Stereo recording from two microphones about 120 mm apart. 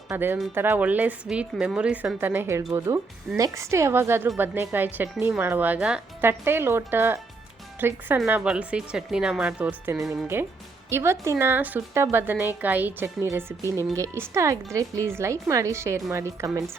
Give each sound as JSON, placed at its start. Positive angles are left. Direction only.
{"t": 0.1, "sound": "a woman's voice", "side_deg": -20}